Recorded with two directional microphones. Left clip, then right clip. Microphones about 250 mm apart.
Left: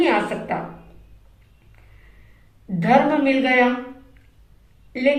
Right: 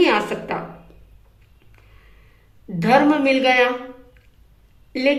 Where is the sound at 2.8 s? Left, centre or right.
Right.